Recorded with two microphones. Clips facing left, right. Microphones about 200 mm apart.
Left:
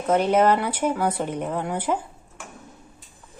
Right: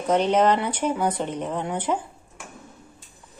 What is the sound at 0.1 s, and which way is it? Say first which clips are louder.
Speech: left 1 dB; 10° left (ahead or behind).